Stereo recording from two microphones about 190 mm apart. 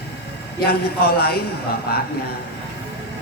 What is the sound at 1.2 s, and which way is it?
Speech, 55° left (ahead or behind).